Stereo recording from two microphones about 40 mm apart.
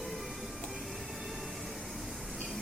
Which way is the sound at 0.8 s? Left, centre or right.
Centre.